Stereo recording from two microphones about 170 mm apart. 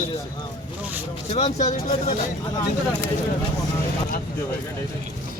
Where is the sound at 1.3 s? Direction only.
40° left (ahead or behind).